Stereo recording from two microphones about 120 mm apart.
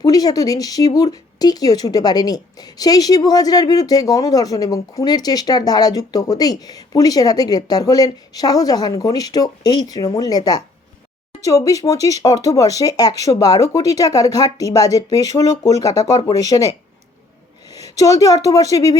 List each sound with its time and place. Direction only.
0.0 s speech: 30° left (ahead or behind)